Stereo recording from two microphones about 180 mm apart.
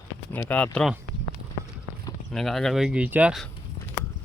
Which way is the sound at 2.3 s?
Centre (ahead or behind).